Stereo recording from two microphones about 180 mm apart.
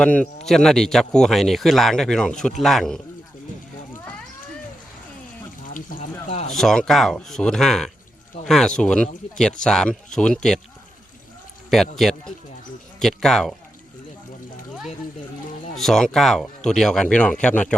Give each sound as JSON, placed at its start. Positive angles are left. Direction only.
{"t": 0.0, "sound": "speech", "side_deg": 5}
{"t": 5.6, "sound": "water", "side_deg": 50}
{"t": 6.2, "sound": "a sound", "side_deg": 40}
{"t": 6.5, "sound": "speech", "side_deg": 0}
{"t": 11.7, "sound": "speech", "side_deg": 0}
{"t": 15.7, "sound": "speech", "side_deg": 0}